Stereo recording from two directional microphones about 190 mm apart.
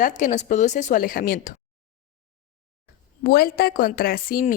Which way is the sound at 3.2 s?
55° left (ahead or behind).